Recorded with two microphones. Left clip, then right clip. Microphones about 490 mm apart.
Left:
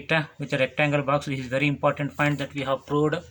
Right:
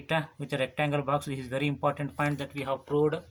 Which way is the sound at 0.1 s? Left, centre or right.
Right.